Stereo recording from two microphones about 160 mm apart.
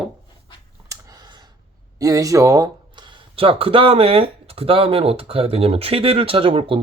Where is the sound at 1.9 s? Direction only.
20° right (ahead or behind).